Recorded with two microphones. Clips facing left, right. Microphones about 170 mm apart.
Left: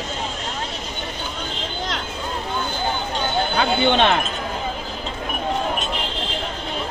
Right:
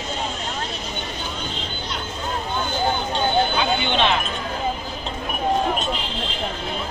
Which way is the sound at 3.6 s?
50° left (ahead or behind).